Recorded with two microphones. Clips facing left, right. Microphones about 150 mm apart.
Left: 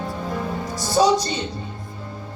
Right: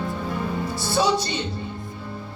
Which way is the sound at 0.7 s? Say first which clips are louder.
Left 5 dB; 40° left (ahead or behind).